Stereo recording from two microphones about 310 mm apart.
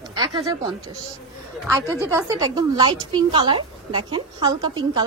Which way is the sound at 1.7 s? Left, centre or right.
Centre.